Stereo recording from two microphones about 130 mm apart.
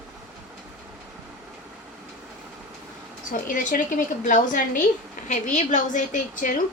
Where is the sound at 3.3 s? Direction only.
90° left.